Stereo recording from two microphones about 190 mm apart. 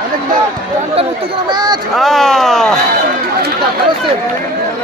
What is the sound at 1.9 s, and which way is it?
Speech, centre (ahead or behind).